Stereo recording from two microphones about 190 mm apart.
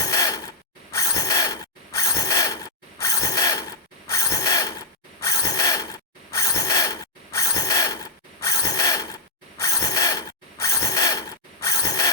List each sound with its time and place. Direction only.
0.0 s mechanisms: 20° left (ahead or behind)